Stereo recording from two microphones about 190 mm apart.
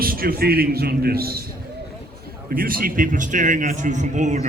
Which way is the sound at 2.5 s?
50° right (ahead or behind).